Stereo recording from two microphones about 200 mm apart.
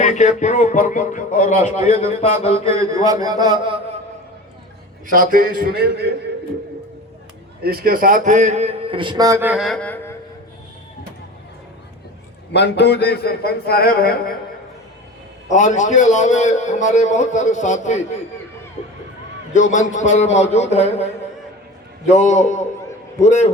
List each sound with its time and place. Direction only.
0.0 s a man's voice: 35° left (ahead or behind)
2.5 s a man's voice: 15° right (ahead or behind)
5.1 s a man's voice: 45° right (ahead or behind)
7.6 s a man's voice: 50° right (ahead or behind); by 10.2 s 10° left (ahead or behind)
12.5 s a man's voice: 55° left (ahead or behind)
15.4 s a man's voice: 40° left (ahead or behind)
20.0 s a man's voice: 35° left (ahead or behind)